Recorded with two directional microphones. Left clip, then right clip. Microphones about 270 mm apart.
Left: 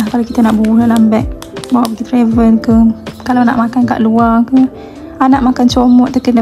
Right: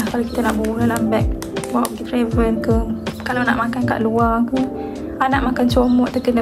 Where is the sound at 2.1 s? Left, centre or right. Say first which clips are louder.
Left 8 dB; left.